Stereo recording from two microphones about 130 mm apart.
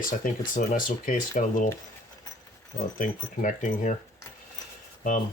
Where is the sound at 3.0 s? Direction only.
90° left.